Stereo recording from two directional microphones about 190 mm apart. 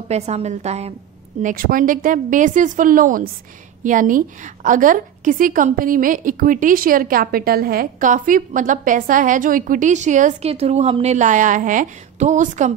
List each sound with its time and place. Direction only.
0.1 s a woman's voice: 35° right (ahead or behind)
1.4 s a woman's voice: 45° right (ahead or behind)